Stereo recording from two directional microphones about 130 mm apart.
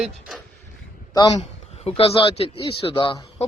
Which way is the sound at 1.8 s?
50° left (ahead or behind).